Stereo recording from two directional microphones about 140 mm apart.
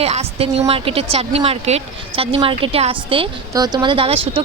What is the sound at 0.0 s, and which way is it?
Speech, 45° right (ahead or behind).